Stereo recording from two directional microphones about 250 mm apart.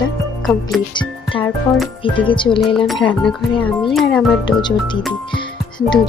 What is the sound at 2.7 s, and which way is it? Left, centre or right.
Speech, centre.